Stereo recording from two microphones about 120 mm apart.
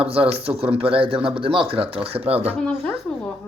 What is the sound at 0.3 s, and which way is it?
Speech, 55° right (ahead or behind).